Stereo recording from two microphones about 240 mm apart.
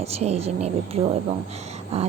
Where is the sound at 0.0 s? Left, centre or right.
Right.